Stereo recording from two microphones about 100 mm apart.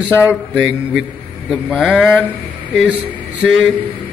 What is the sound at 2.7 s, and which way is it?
Mantra, 10° right (ahead or behind).